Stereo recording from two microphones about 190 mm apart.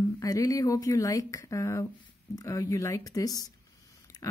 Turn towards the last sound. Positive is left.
turn(degrees=15)  # may be behind; listen again after turning